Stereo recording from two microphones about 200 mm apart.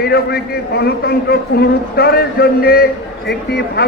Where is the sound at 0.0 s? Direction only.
50° left (ahead or behind).